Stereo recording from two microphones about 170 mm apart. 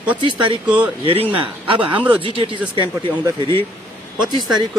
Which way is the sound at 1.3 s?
30° right (ahead or behind).